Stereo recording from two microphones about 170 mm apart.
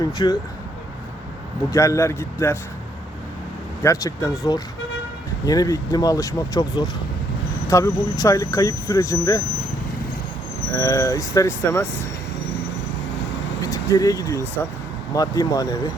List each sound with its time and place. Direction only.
0.2 s speech: 25° left (ahead or behind)
1.7 s speech: 20° left (ahead or behind)
3.8 s speech: 20° left (ahead or behind)
10.8 s speech: 20° left (ahead or behind)
13.6 s speech: 20° left (ahead or behind)